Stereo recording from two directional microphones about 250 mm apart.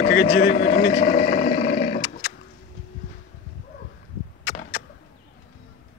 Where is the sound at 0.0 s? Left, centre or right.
Left.